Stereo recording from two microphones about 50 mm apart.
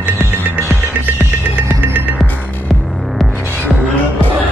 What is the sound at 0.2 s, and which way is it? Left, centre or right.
Music, right.